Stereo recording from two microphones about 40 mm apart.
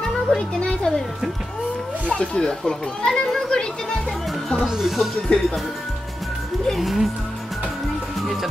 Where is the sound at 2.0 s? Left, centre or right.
Left.